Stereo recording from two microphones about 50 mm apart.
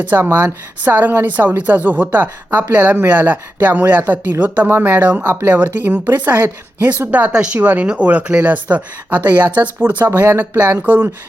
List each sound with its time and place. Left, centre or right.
0.1 s speech: right
4.9 s speech: right
7.1 s speech: right
10.9 s speech: right